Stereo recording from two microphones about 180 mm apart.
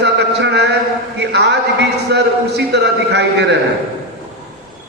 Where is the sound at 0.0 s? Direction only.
70° right (ahead or behind).